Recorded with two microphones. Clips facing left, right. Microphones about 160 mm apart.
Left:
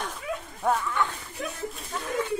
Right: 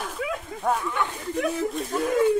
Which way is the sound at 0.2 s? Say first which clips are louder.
Right 4 dB; 90° right.